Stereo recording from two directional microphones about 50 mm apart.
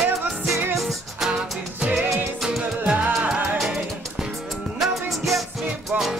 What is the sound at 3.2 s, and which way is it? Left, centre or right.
Music, right.